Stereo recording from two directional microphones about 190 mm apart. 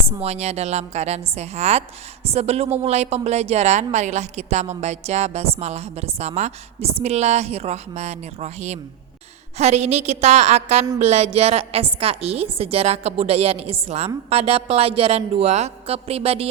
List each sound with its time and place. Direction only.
0.2 s a woman's voice: 35° right (ahead or behind)